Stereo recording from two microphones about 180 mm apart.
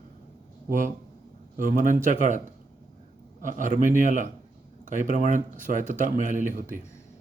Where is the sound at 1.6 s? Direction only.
50° right (ahead or behind).